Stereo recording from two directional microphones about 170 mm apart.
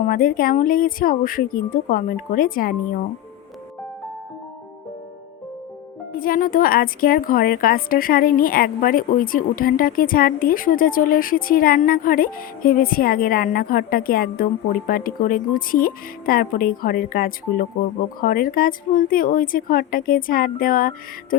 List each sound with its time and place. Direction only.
0.1 s a woman's voice: 55° left (ahead or behind)
6.1 s a woman's voice: 55° left (ahead or behind)